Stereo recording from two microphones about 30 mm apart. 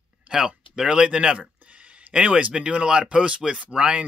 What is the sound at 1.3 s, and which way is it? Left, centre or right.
Speech, right.